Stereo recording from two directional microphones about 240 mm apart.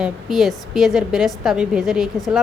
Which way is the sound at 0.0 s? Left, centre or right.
Centre.